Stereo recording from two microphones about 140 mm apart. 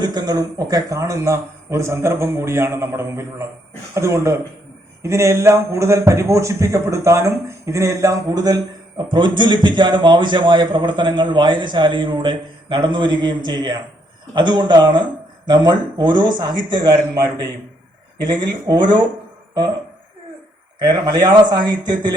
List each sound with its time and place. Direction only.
0.0 s a man's voice: 30° right (ahead or behind)
18.7 s a man's voice: 30° right (ahead or behind)
20.8 s a man's voice: 30° right (ahead or behind)